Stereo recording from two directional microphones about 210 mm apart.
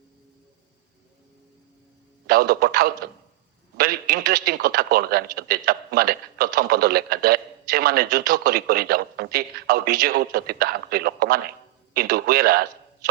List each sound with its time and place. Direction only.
2.2 s a man's voice: 45° right (ahead or behind)